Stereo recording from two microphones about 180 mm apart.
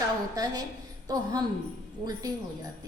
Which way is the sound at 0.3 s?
20° right (ahead or behind).